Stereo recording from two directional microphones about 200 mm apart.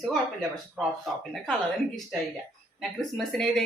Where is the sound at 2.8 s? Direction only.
Centre (ahead or behind).